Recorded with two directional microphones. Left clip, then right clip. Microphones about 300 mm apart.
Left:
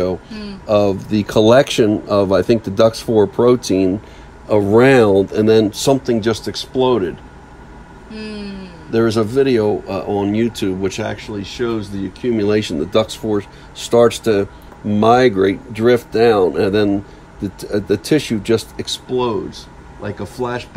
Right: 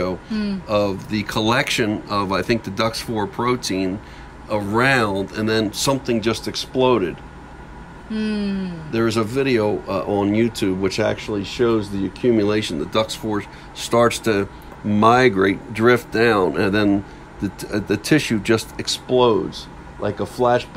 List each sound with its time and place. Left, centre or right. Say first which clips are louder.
0.7 s speech: left 6 dB; centre
5.9 s speech: left 5 dB; centre
8.1 s a sound: right 4 dB; right
8.9 s speech: left 5 dB; centre
19.5 s a sound: right 1 dB; centre
20.3 s speech: right 6 dB; right